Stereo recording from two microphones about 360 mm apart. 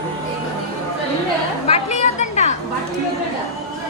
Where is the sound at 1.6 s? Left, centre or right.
Centre.